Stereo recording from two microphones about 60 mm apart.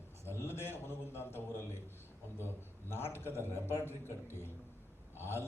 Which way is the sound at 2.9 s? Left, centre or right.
Left.